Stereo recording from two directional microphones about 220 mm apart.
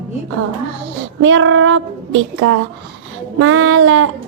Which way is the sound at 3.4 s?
65° right (ahead or behind).